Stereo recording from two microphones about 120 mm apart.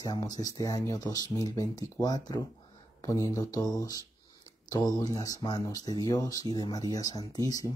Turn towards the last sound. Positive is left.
turn(degrees=30)  # may be behind; listen again after turning